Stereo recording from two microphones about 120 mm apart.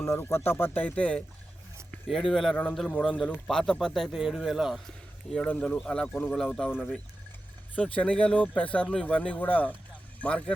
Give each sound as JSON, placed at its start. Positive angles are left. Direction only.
{"t": 0.0, "sound": "speech", "side_deg": 20}
{"t": 2.0, "sound": "speech", "side_deg": 0}
{"t": 5.3, "sound": "speech", "side_deg": 10}
{"t": 7.8, "sound": "speech", "side_deg": 10}